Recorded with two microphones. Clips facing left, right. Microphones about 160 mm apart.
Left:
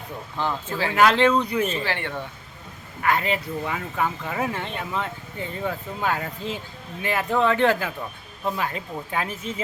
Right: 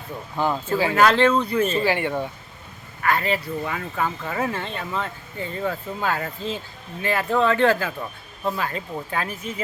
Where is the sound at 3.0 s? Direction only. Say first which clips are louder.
Right 1 dB; 15° left (ahead or behind).